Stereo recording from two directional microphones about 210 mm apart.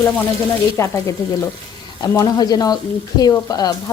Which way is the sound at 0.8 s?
15° left (ahead or behind).